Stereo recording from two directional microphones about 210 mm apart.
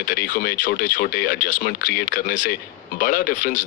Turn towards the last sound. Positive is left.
turn(degrees=35)  # may be behind; listen again after turning